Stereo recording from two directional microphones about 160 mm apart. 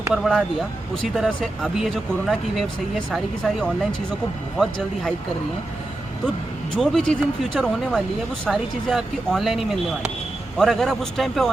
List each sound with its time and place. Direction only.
0.1 s speech: centre (ahead or behind)
6.7 s speech: centre (ahead or behind)